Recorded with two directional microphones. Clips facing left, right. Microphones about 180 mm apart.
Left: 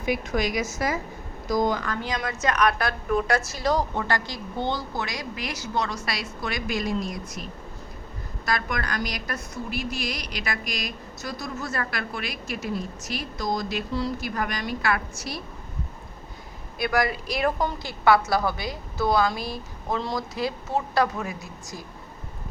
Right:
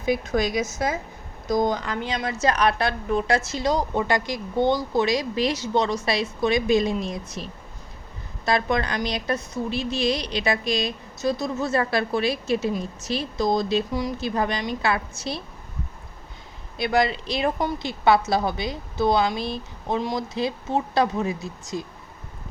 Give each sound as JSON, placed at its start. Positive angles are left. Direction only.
{"t": 0.0, "sound": "a woman's voice", "side_deg": -25}
{"t": 13.9, "sound": "a woman's voice", "side_deg": -15}
{"t": 16.7, "sound": "a woman's voice", "side_deg": -25}